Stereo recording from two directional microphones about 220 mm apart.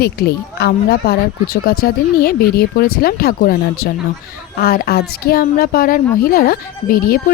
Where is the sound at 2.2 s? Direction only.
45° left (ahead or behind).